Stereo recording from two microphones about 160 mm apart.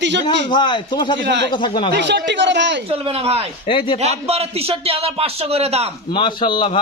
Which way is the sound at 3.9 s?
40° right (ahead or behind).